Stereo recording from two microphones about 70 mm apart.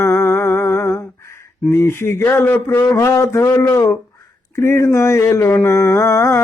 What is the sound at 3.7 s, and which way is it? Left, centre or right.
Mantra, left.